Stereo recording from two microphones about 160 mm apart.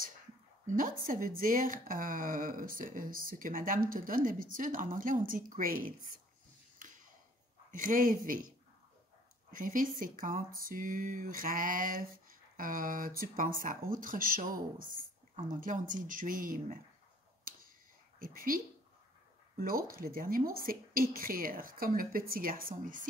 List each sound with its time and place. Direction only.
0.7 s speech: 55° right (ahead or behind)
6.8 s a sound: 55° right (ahead or behind)
7.7 s speech: 55° right (ahead or behind)
9.5 s speech: 55° right (ahead or behind)
18.2 s speech: 60° right (ahead or behind)